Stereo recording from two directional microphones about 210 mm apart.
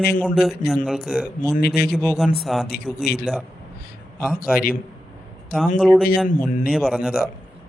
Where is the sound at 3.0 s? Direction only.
50° left (ahead or behind).